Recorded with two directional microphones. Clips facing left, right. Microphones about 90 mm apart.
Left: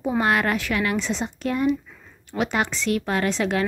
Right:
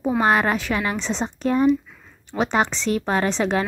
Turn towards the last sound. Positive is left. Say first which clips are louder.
# right 1 dB
turn(degrees=-25)  # may be behind; listen again after turning